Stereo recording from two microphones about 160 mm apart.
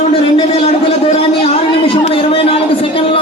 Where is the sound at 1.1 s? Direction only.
35° left (ahead or behind).